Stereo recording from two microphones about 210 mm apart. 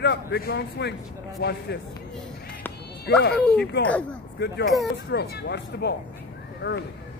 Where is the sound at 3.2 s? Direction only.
50° left (ahead or behind).